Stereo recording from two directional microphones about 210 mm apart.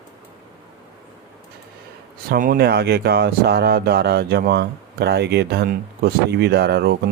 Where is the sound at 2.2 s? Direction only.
40° right (ahead or behind).